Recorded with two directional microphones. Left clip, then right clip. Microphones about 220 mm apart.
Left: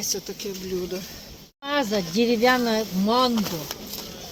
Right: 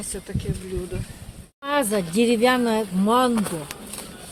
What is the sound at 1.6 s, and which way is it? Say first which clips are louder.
Speech: right 2 dB; 55° right (ahead or behind).